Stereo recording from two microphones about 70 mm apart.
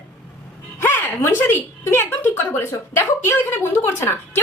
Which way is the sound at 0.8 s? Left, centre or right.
Left.